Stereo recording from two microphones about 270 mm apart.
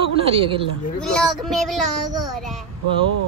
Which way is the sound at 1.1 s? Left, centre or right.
Centre.